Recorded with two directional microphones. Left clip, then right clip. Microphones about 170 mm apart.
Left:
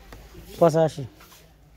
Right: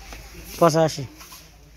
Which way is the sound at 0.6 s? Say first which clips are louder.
Right 1 dB; 25° left (ahead or behind).